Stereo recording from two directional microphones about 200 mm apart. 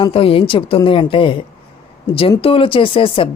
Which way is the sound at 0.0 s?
30° left (ahead or behind).